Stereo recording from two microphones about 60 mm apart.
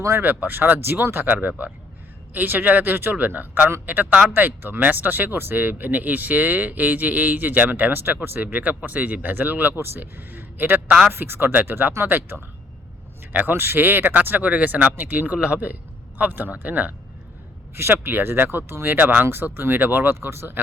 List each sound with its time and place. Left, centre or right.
0.2 s speech: right
17.7 s speech: right